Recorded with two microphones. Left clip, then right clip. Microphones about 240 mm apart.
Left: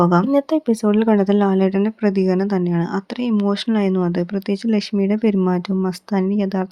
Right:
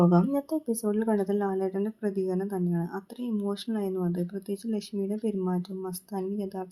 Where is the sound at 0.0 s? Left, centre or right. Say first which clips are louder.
Left 8 dB; centre.